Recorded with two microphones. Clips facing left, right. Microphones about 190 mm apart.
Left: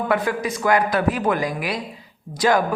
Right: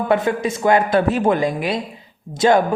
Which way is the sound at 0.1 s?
25° right (ahead or behind).